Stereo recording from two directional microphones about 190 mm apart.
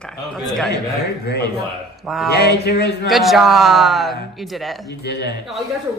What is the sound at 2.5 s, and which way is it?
Speech, 60° left (ahead or behind).